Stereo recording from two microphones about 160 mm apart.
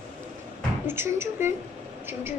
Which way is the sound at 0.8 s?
15° right (ahead or behind).